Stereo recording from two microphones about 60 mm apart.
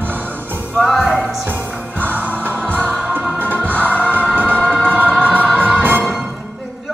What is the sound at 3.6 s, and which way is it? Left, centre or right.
Music, left.